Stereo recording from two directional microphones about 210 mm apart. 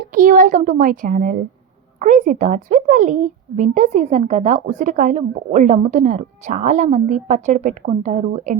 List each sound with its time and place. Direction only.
0.1 s a woman's voice: 40° right (ahead or behind)